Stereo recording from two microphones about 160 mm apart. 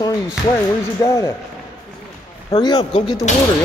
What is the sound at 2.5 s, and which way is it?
Speech, 25° left (ahead or behind).